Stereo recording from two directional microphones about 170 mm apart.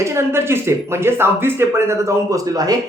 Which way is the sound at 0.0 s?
15° right (ahead or behind).